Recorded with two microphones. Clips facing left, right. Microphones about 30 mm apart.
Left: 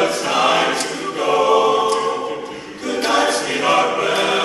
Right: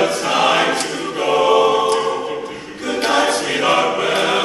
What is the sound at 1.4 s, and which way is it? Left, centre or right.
Music, centre.